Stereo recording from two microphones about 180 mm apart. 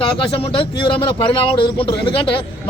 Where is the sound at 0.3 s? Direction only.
30° left (ahead or behind).